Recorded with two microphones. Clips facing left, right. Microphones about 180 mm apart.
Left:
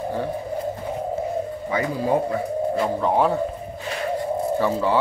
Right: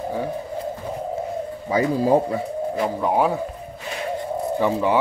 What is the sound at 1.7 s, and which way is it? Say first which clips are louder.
Speech: right 5 dB; 35° right (ahead or behind).